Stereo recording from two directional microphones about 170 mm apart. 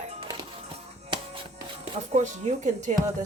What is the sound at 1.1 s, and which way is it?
Music, 30° right (ahead or behind).